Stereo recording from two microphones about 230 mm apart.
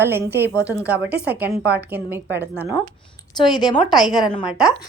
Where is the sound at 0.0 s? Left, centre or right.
Centre.